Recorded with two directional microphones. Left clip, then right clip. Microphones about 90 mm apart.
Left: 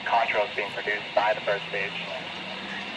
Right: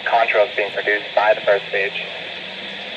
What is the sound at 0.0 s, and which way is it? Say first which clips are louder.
Speech: right 8 dB; 30° right (ahead or behind).